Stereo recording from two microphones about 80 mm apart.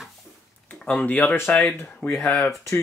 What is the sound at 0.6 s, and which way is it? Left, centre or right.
Speech, left.